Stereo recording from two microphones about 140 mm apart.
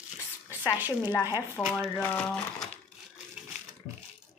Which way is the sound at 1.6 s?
15° left (ahead or behind).